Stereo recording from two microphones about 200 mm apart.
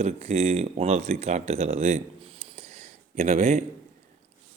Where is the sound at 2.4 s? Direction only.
30° right (ahead or behind).